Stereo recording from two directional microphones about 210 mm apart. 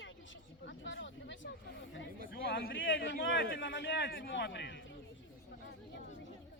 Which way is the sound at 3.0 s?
55° left (ahead or behind).